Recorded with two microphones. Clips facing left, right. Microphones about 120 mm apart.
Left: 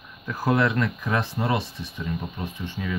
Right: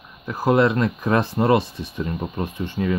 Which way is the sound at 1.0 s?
40° right (ahead or behind).